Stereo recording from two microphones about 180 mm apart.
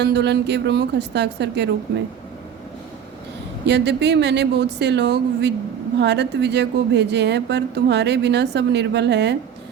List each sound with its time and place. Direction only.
0.0 s speech: 70° right (ahead or behind)
3.7 s speech: 70° right (ahead or behind)